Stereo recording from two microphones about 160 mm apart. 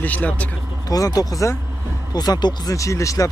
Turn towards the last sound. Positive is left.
turn(degrees=20)  # may be behind; listen again after turning